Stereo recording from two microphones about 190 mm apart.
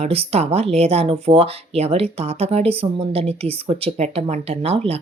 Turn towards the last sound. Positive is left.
turn(degrees=-30)  # may be behind; listen again after turning